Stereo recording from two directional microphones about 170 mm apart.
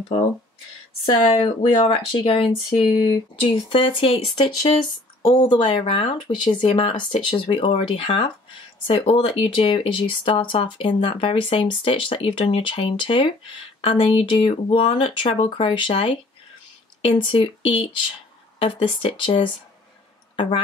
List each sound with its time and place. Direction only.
1.0 s speech: 35° left (ahead or behind)